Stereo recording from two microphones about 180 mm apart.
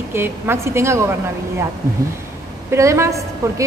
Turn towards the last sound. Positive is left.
turn(degrees=-15)  # may be behind; listen again after turning